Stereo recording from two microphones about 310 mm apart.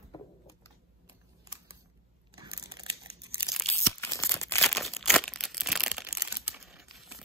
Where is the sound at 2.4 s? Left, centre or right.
Centre.